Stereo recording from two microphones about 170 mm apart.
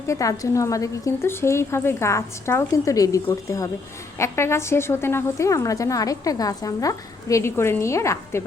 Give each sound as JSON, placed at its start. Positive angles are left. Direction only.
{"t": 0.1, "sound": "a woman's voice", "side_deg": 20}